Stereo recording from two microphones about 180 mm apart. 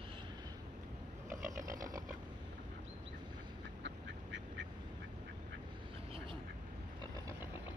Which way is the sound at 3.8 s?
80° right.